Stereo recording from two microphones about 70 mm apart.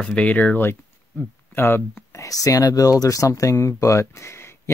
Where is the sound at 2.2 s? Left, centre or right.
Left.